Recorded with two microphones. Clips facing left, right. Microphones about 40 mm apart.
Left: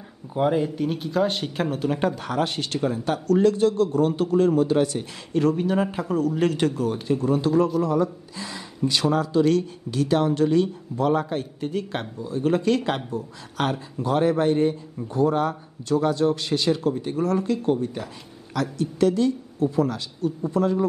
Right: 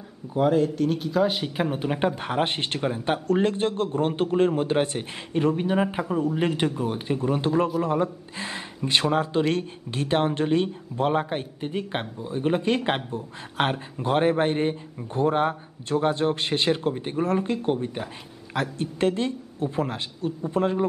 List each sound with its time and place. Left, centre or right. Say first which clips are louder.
0.3 s speech: right 1 dB; centre; by 5.0 s right
5.3 s a man's voice: left 2 dB; right